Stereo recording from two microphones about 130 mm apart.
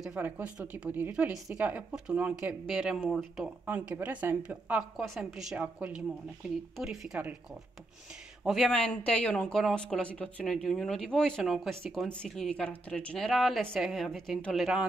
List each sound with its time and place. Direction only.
0.1 s speech: 10° right (ahead or behind)
3.6 s speech: 15° right (ahead or behind)
8.5 s speech: 5° left (ahead or behind)